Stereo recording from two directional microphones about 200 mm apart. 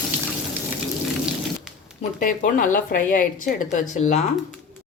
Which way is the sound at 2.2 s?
45° left (ahead or behind).